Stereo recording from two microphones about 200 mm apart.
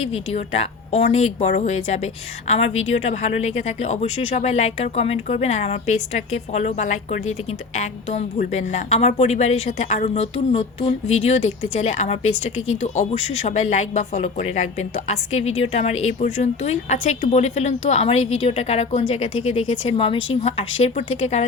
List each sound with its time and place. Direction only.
0.3 s a woman's voice: 30° left (ahead or behind)
13.1 s speech: 90° left
13.4 s a woman's voice: 35° left (ahead or behind)